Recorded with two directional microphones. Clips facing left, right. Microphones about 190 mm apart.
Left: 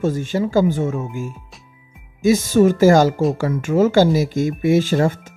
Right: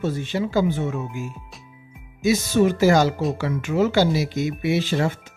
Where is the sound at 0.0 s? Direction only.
45° left (ahead or behind).